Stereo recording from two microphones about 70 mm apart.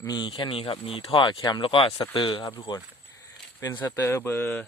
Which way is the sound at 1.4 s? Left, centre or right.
Left.